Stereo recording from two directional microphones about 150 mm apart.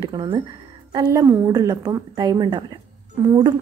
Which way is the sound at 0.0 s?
30° right (ahead or behind).